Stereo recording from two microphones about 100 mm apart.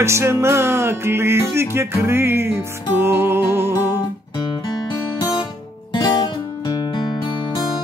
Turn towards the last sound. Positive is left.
turn(degrees=50)  # may be behind; listen again after turning